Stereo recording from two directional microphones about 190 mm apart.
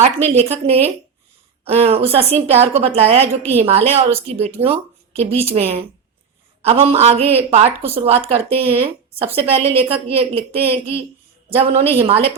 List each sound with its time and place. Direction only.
0.0 s speech: 35° right (ahead or behind)